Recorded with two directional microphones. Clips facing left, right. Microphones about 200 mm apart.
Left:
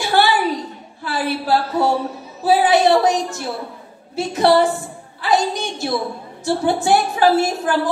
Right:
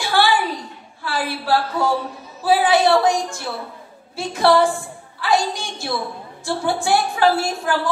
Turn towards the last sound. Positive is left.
turn(degrees=20)  # may be behind; listen again after turning